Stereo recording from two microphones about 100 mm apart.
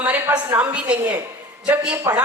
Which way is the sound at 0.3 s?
20° right (ahead or behind).